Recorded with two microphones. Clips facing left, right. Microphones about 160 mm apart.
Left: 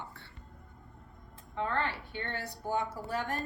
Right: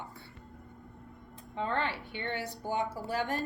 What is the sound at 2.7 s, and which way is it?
Speech, 20° right (ahead or behind).